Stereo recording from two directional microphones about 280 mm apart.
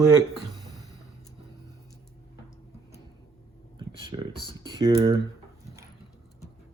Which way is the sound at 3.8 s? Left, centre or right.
Centre.